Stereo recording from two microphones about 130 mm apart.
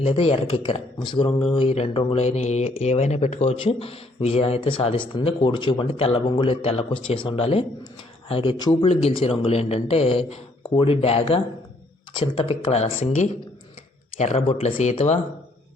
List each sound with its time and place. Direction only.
0.0 s speech: 45° left (ahead or behind)